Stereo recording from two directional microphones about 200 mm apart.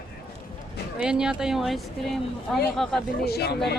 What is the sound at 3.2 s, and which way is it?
Speech, 55° left (ahead or behind).